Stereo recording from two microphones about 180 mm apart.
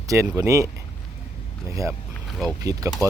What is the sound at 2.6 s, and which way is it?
Speech, 20° right (ahead or behind).